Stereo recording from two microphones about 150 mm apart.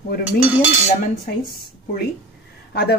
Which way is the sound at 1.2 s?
85° left.